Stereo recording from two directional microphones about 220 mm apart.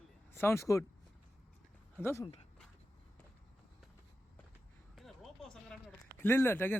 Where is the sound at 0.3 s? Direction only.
10° left (ahead or behind).